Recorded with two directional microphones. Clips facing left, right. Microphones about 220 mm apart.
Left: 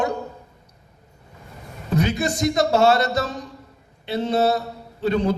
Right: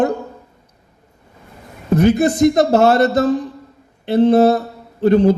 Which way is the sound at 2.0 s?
55° right (ahead or behind).